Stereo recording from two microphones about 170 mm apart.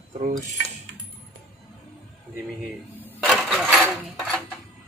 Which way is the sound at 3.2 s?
5° right (ahead or behind).